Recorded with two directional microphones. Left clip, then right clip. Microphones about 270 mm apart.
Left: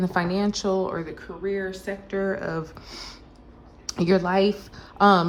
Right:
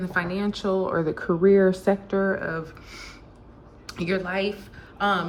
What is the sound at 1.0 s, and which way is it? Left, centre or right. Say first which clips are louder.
Speech: right 10 dB; centre.